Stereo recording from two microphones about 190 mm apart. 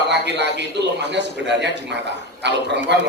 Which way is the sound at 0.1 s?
65° right (ahead or behind).